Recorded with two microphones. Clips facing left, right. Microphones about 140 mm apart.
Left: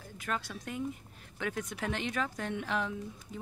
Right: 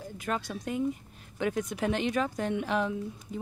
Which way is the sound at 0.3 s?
25° right (ahead or behind).